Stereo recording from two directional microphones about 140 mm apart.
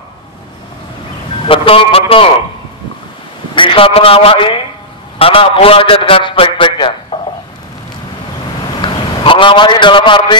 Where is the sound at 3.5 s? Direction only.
40° left (ahead or behind).